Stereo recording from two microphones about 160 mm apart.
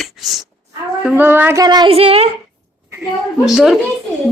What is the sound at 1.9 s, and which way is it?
Speech, 40° right (ahead or behind).